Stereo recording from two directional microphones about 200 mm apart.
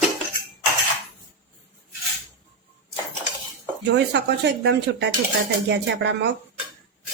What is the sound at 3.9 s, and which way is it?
Speech, 60° right (ahead or behind).